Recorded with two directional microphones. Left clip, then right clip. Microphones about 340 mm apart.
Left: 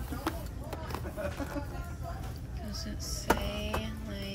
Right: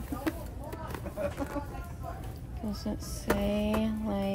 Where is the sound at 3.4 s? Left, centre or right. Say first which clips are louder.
Right 6 dB; centre.